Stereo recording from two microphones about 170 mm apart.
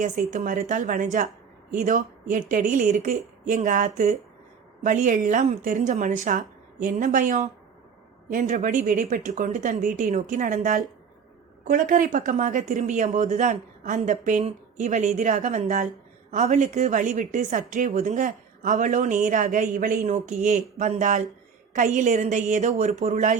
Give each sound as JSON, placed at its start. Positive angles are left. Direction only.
{"t": 0.0, "sound": "a woman's voice", "side_deg": -45}